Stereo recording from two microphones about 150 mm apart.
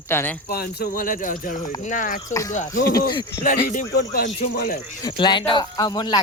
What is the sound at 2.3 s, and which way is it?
Speech, 20° left (ahead or behind).